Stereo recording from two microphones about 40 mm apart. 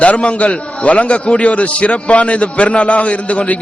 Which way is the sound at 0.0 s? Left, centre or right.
Left.